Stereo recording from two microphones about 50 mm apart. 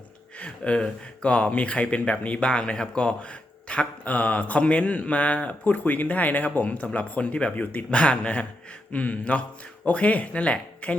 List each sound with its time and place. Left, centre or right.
0.3 s speech: left
7.5 s speech: left
7.9 s speech: left